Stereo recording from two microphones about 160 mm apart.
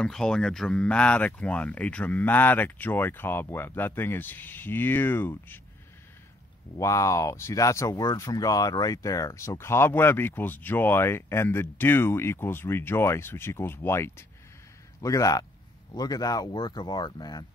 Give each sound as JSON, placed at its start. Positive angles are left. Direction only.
{"t": 0.0, "sound": "speech", "side_deg": 5}
{"t": 6.8, "sound": "speech", "side_deg": 20}